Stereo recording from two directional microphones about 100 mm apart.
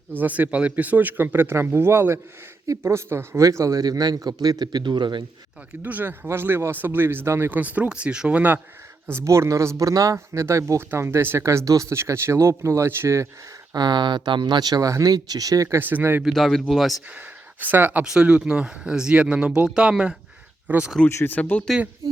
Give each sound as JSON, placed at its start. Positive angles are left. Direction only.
{"t": 0.1, "sound": "a man's voice", "side_deg": -15}
{"t": 5.8, "sound": "speech", "side_deg": -20}
{"t": 9.1, "sound": "speech", "side_deg": -30}
{"t": 13.7, "sound": "a man's voice", "side_deg": -50}
{"t": 15.8, "sound": "speech", "side_deg": -20}
{"t": 16.2, "sound": "speech", "side_deg": 0}
{"t": 17.1, "sound": "speech", "side_deg": -15}
{"t": 18.0, "sound": "speech", "side_deg": -10}
{"t": 21.2, "sound": "speech", "side_deg": 20}